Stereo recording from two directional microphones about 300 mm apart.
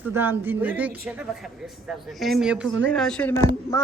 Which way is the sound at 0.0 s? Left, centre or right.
Centre.